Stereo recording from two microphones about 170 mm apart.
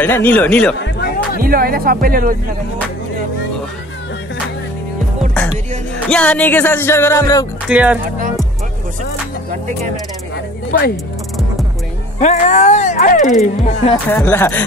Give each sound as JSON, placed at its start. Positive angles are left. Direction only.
{"t": 0.0, "sound": "music", "side_deg": 10}
{"t": 0.7, "sound": "music", "side_deg": 80}
{"t": 1.4, "sound": "speech", "side_deg": -60}
{"t": 6.0, "sound": "music", "side_deg": 5}
{"t": 7.6, "sound": "speech", "side_deg": -5}
{"t": 10.3, "sound": "a sound", "side_deg": 60}
{"t": 12.2, "sound": "speech", "side_deg": 45}
{"t": 14.1, "sound": "music", "side_deg": 10}